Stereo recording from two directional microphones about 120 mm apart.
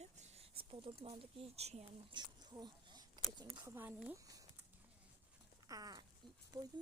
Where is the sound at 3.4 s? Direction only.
30° right (ahead or behind).